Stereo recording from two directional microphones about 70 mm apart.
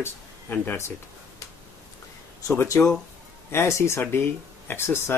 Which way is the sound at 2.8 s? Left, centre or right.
Left.